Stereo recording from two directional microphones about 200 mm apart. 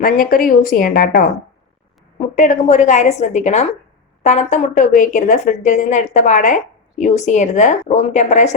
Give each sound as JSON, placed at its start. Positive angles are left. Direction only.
{"t": 0.0, "sound": "a woman's voice", "side_deg": 45}